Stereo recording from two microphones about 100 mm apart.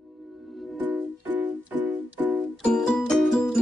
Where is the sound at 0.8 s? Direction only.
20° right (ahead or behind).